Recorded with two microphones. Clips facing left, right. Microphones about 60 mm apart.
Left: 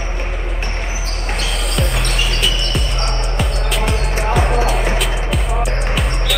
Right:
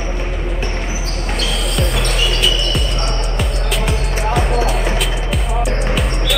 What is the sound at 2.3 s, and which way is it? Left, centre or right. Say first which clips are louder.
Music: right 2 dB; centre.